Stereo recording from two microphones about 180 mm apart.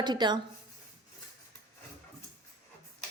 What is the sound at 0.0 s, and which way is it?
Speech, 25° right (ahead or behind).